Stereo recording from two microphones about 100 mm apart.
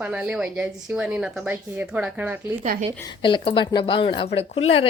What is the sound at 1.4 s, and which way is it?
Speech, 15° right (ahead or behind).